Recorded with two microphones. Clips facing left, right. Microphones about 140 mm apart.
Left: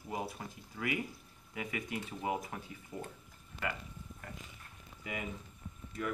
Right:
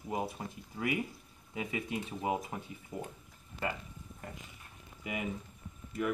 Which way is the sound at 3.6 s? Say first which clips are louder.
Right 3 dB; 30° right (ahead or behind).